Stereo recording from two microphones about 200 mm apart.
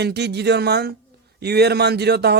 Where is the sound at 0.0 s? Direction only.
55° right (ahead or behind).